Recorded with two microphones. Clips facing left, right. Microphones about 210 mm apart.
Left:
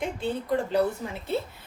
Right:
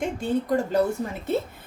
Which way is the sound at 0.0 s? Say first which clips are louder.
Right 4 dB; 45° right (ahead or behind).